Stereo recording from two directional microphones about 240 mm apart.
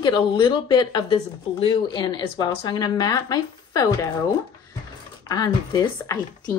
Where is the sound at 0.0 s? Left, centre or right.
Centre.